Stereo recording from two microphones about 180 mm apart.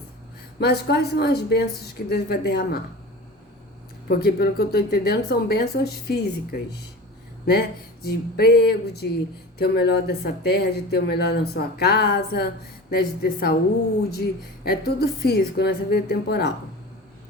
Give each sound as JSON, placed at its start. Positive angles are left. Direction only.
{"t": 0.6, "sound": "speech", "side_deg": 65}
{"t": 4.1, "sound": "speech", "side_deg": 60}
{"t": 8.0, "sound": "speech", "side_deg": 60}